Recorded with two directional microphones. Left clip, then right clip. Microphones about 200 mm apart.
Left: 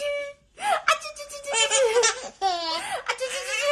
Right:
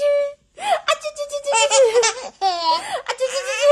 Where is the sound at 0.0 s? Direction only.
50° right (ahead or behind).